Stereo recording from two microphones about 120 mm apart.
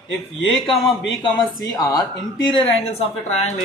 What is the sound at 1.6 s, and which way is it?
A woman's voice, 30° left (ahead or behind).